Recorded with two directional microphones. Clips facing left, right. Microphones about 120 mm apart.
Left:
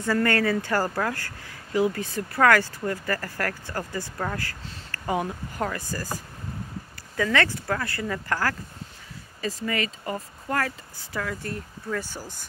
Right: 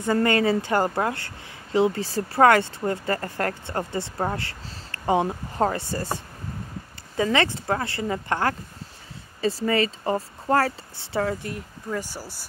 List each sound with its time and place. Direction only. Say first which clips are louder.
0.0 s a woman's voice: right 2 dB; 20° right (ahead or behind)
11.4 s speech: even; 15° right (ahead or behind)